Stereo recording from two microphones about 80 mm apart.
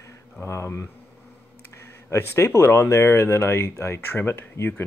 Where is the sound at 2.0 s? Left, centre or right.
Left.